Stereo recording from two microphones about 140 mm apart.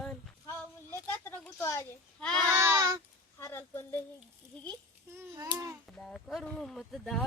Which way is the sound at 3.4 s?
15° left (ahead or behind).